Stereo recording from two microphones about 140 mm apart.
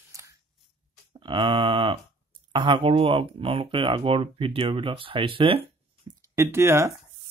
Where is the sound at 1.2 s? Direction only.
35° right (ahead or behind).